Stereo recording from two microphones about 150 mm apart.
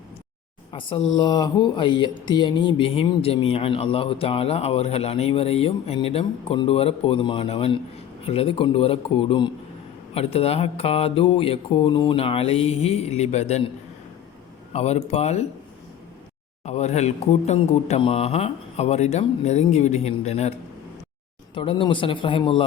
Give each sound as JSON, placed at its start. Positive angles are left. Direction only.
{"t": 0.7, "sound": "speech", "side_deg": 35}
{"t": 14.7, "sound": "speech", "side_deg": 45}
{"t": 16.6, "sound": "speech", "side_deg": 50}
{"t": 21.5, "sound": "speech", "side_deg": 35}